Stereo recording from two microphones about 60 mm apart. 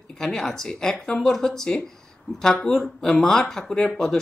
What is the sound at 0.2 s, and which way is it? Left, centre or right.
Speech, centre.